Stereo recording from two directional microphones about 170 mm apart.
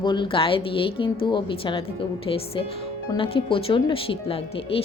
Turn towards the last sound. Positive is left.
turn(degrees=35)  # may be behind; listen again after turning